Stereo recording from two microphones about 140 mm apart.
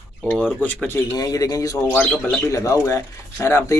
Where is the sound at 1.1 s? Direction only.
25° left (ahead or behind).